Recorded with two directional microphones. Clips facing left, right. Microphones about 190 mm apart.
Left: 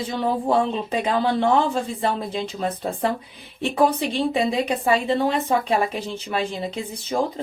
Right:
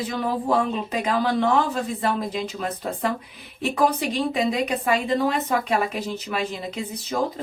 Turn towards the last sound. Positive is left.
turn(degrees=30)  # may be behind; listen again after turning